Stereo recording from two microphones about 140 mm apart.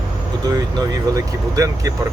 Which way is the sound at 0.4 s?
25° right (ahead or behind).